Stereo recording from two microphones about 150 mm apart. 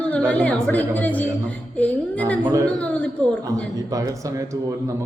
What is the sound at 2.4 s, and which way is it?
Speech, 20° right (ahead or behind).